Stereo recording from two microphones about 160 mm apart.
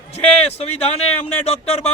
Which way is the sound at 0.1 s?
40° left (ahead or behind).